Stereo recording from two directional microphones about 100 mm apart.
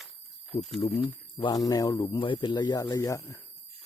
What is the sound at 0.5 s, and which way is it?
Speech, 20° left (ahead or behind).